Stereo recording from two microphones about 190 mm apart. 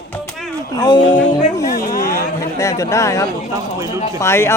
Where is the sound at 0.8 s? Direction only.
20° left (ahead or behind).